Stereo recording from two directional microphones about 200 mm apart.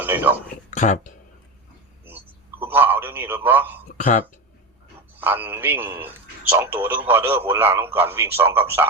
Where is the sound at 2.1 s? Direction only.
10° right (ahead or behind).